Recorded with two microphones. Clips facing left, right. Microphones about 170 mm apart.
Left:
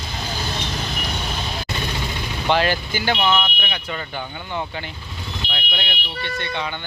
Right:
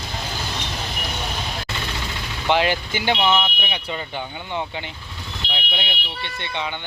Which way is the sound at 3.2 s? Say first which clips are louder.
Even; 10° right (ahead or behind).